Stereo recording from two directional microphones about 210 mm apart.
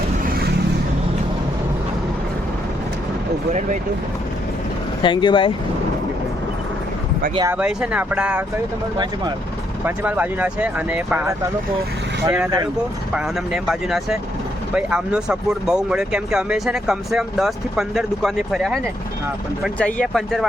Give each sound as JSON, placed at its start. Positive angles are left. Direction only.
{"t": 5.0, "sound": "speech", "side_deg": 20}
{"t": 7.3, "sound": "speech", "side_deg": -10}
{"t": 9.8, "sound": "speech", "side_deg": -10}
{"t": 13.1, "sound": "speech", "side_deg": 0}